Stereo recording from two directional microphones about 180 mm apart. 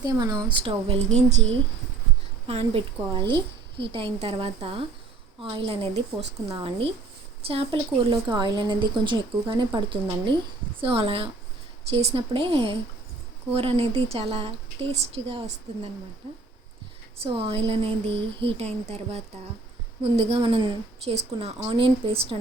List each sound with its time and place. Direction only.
0.0 s a woman's voice: 20° right (ahead or behind); by 1.4 s 40° right (ahead or behind)
2.5 s a woman's voice: 35° right (ahead or behind)
17.2 s a woman's voice: 30° right (ahead or behind)